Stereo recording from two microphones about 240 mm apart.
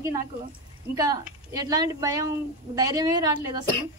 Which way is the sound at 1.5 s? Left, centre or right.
Centre.